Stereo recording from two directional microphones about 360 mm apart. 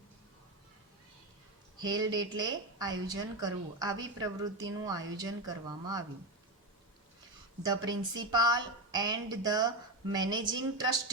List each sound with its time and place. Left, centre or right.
1.8 s speech: centre
7.7 s speech: centre